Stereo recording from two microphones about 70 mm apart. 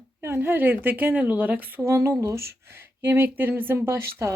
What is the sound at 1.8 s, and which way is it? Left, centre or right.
Speech, right.